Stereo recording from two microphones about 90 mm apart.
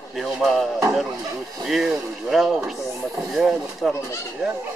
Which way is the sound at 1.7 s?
5° right (ahead or behind).